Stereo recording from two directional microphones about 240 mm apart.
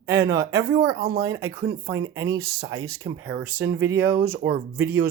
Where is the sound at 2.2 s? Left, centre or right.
Right.